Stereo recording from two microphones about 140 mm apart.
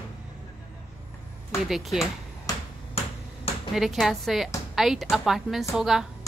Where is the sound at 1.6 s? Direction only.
Centre (ahead or behind).